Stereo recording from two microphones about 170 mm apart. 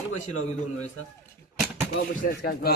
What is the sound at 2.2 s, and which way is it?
Speech, 65° left (ahead or behind).